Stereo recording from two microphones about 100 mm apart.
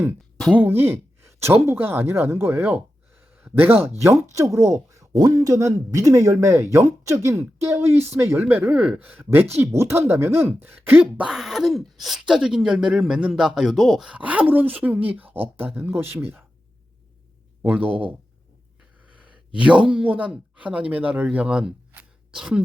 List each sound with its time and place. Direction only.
0.5 s speech: 20° right (ahead or behind)
8.4 s speech: 15° right (ahead or behind)
11.3 s speech: 5° right (ahead or behind); by 16.4 s 25° right (ahead or behind)
17.6 s speech: 15° right (ahead or behind)
19.5 s speech: 10° right (ahead or behind)